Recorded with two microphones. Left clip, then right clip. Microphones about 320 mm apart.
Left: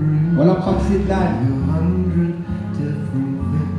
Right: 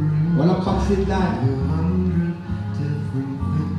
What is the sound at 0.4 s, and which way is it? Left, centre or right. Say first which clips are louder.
Speech: left 4 dB; centre.